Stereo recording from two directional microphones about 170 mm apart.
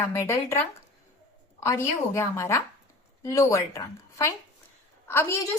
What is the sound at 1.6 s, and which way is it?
A woman's voice, 15° left (ahead or behind).